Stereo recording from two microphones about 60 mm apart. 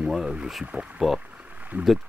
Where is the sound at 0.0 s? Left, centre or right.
Centre.